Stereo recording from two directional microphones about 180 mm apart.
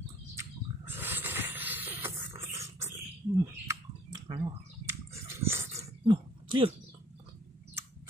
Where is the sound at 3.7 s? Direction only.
25° right (ahead or behind).